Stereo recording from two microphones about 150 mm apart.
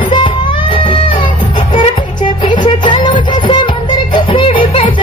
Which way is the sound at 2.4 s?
30° left (ahead or behind).